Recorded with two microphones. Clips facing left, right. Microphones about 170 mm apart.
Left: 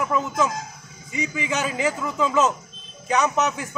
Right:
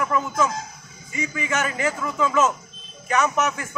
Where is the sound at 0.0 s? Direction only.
20° left (ahead or behind).